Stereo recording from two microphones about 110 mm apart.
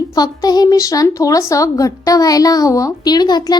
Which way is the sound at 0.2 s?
35° left (ahead or behind).